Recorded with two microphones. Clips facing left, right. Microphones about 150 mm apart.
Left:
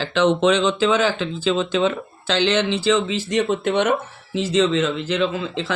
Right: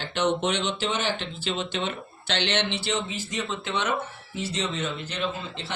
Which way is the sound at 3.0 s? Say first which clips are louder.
Left 11 dB; 85° left.